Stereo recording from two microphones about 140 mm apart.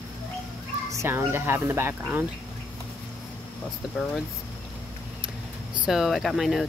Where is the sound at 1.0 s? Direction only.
15° right (ahead or behind).